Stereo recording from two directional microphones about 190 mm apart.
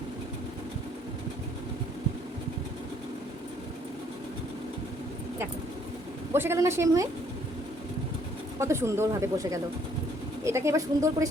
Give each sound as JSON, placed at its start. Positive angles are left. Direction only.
{"t": 6.3, "sound": "speech", "side_deg": -10}
{"t": 8.5, "sound": "speech", "side_deg": -15}